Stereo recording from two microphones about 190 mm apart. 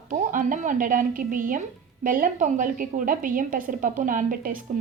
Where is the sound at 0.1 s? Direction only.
45° right (ahead or behind).